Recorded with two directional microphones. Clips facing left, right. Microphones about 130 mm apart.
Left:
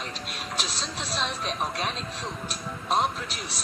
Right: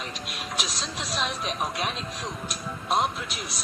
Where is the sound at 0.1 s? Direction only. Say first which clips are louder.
Even; 35° left (ahead or behind).